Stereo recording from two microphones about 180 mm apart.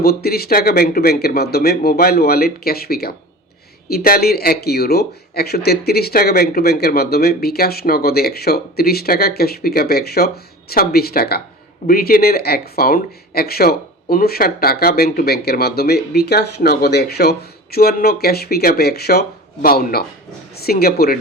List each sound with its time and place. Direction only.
0.0 s speech: 60° left (ahead or behind)